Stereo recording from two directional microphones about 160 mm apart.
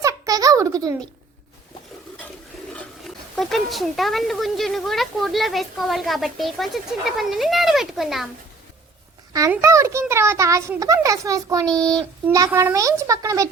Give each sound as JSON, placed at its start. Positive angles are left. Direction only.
{"t": 0.0, "sound": "a sound", "side_deg": -20}
{"t": 2.7, "sound": "speech", "side_deg": 0}
{"t": 9.5, "sound": "a child's voice", "side_deg": -20}